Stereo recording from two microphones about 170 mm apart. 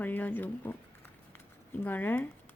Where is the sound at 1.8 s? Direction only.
10° left (ahead or behind).